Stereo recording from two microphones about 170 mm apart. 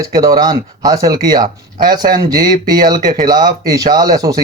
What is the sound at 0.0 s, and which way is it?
Speech, 20° right (ahead or behind).